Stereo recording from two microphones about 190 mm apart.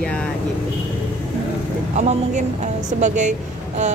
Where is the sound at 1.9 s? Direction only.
40° right (ahead or behind).